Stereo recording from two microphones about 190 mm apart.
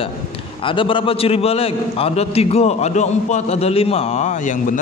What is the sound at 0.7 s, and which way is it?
A man's voice, 25° left (ahead or behind).